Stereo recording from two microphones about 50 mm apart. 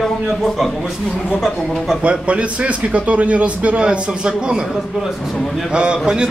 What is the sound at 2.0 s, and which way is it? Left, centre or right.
Speech, right.